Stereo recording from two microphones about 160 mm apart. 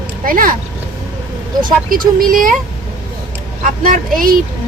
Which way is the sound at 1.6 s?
60° right (ahead or behind).